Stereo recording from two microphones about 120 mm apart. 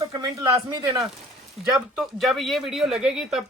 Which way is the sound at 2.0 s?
Centre (ahead or behind).